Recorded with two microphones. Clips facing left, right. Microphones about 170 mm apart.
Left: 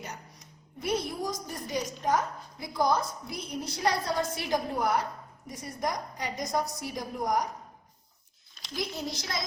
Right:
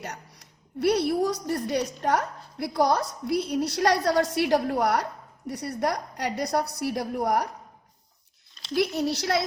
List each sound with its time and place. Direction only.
0.0 s a woman's voice: 70° right (ahead or behind)
8.7 s a woman's voice: 70° right (ahead or behind)